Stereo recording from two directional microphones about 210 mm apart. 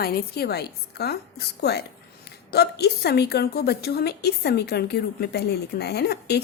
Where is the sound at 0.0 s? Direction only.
45° left (ahead or behind).